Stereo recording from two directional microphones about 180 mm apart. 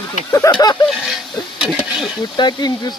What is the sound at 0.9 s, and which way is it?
Speech, centre (ahead or behind).